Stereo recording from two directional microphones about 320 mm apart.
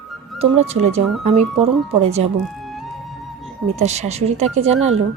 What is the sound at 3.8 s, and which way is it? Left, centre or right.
Speech, right.